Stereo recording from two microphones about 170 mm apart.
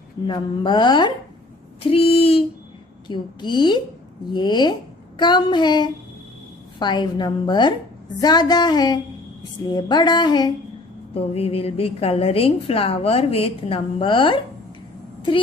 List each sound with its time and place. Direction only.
0.3 s a woman's voice: 25° left (ahead or behind)
11.1 s a woman's voice: 35° left (ahead or behind)